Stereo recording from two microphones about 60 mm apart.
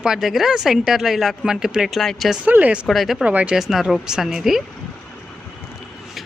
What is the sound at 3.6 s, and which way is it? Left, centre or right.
Speech, centre.